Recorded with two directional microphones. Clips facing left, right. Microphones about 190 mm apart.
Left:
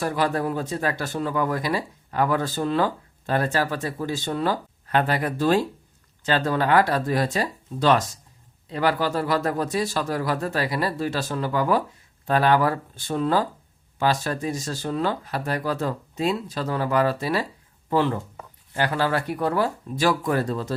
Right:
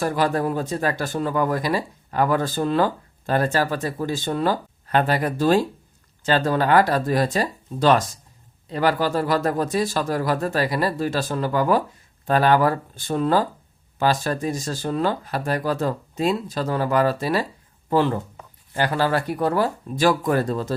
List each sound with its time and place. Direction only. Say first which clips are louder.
0.0 s speech: right 2 dB; 40° right (ahead or behind)